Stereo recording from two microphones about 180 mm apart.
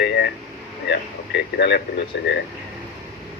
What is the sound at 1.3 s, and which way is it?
Speech, 70° left (ahead or behind).